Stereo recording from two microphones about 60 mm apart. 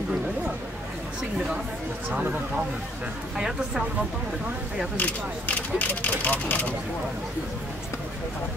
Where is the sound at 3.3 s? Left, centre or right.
Centre.